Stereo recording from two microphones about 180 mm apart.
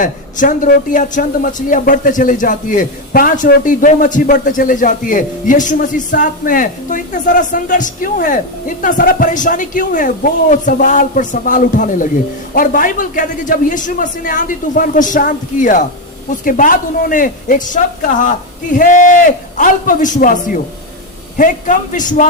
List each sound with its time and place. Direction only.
0.0 s a man's voice: 45° left (ahead or behind)